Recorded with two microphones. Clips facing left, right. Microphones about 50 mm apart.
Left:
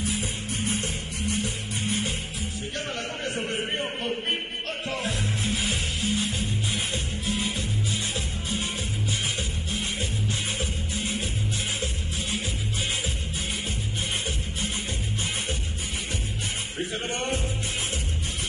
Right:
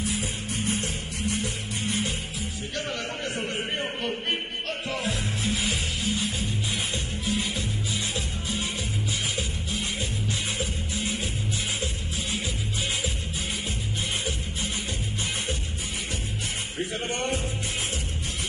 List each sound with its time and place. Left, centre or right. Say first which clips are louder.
0.1 s music: even; left
4.8 s music: left 1 dB; left
10.6 s music: even; left